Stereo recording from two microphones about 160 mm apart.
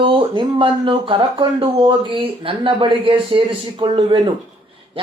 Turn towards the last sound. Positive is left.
turn(degrees=-30)  # may be behind; listen again after turning